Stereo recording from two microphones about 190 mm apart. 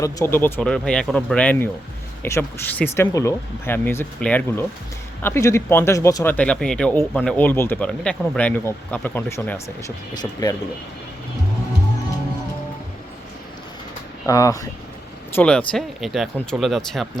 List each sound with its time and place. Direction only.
0.0 s speech: 15° left (ahead or behind)
14.3 s speech: 15° left (ahead or behind)
15.4 s speech: 5° left (ahead or behind)